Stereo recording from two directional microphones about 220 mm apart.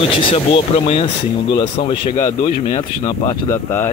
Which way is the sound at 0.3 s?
25° left (ahead or behind).